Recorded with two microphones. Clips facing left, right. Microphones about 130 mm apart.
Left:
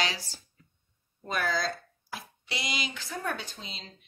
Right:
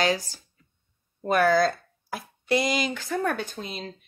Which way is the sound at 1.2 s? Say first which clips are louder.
Right 10 dB; 55° right (ahead or behind).